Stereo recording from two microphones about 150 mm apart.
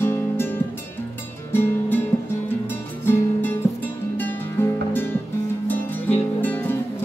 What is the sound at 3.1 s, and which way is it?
Music, 15° left (ahead or behind).